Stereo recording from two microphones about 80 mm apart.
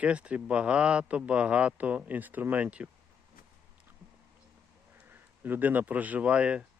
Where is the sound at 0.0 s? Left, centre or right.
Centre.